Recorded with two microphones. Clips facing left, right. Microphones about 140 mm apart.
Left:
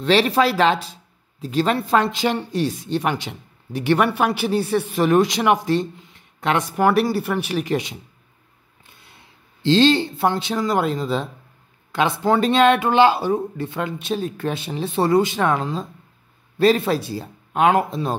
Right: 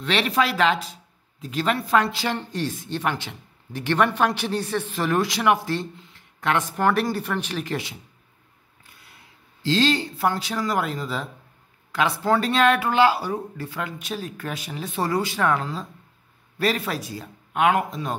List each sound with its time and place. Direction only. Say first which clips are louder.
0.0 s a woman's voice: left 6 dB; 30° left (ahead or behind)